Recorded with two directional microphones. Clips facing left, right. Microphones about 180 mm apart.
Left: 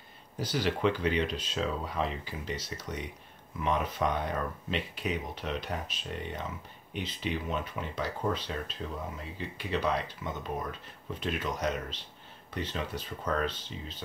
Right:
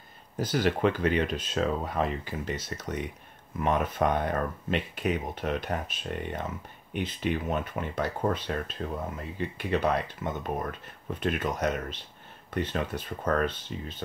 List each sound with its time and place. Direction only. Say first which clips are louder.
0.4 s speech: right 4 dB; 50° right (ahead or behind)